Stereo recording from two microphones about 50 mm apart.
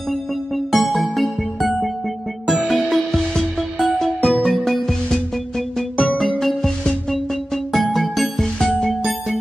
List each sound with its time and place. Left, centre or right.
0.7 s music: centre
5.8 s music: centre
6.1 s music: centre